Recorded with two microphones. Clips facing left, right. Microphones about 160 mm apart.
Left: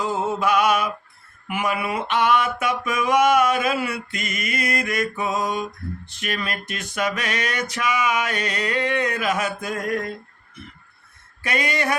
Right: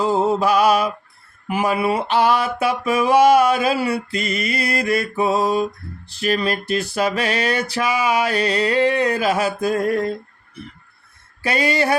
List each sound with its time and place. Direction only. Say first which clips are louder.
0.0 s mantra: right 5 dB; 35° right (ahead or behind)
1.5 s music: right 5 dB; 35° right (ahead or behind)
11.4 s music: right 5 dB; 30° right (ahead or behind)